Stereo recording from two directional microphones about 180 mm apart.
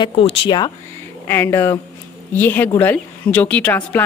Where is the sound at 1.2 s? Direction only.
15° left (ahead or behind).